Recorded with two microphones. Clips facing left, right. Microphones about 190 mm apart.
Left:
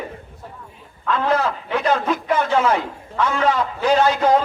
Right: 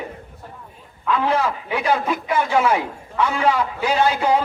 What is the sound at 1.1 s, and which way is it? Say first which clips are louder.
A man's voice: even; 10° right (ahead or behind).